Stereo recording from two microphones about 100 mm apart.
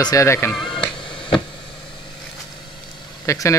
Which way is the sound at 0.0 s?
35° left (ahead or behind).